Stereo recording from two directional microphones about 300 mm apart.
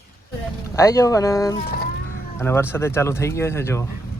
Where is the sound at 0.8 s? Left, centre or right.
Centre.